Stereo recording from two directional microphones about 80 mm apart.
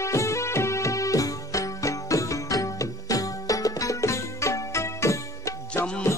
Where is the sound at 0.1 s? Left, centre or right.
Left.